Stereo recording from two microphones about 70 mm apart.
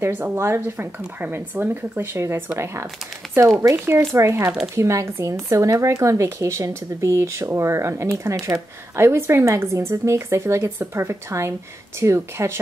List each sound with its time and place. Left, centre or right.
0.0 s a woman's voice: right